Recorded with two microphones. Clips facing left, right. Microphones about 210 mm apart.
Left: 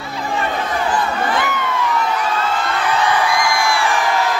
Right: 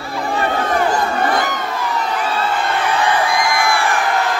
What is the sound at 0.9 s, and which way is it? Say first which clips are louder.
Crowd: right 2 dB; 40° right (ahead or behind).